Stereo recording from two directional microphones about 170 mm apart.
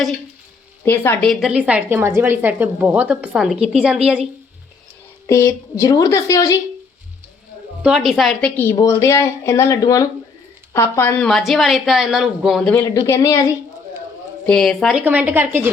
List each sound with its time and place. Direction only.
0.9 s a woman's voice: 10° left (ahead or behind)
1.3 s speech: centre (ahead or behind)
5.2 s speech: 15° left (ahead or behind)
7.8 s a woman's voice: 5° right (ahead or behind)
12.8 s a woman's voice: 15° left (ahead or behind)
14.4 s a woman's voice: 5° left (ahead or behind)
14.9 s speech: 10° right (ahead or behind)